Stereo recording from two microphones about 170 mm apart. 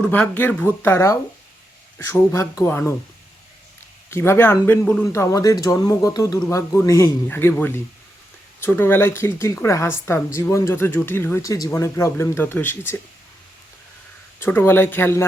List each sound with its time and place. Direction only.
0.0 s speech: 10° left (ahead or behind)
4.1 s speech: 15° left (ahead or behind)
14.3 s speech: 15° left (ahead or behind)